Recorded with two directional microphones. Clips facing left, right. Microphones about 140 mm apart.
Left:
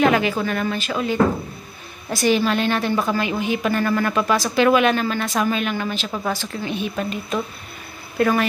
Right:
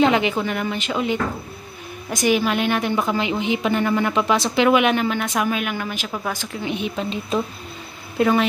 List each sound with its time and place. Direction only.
0.0 s a woman's voice: 20° right (ahead or behind)
8.2 s a woman's voice: 15° right (ahead or behind)